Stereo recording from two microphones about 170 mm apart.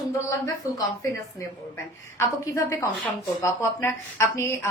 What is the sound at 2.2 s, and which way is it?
A woman's voice, 15° left (ahead or behind).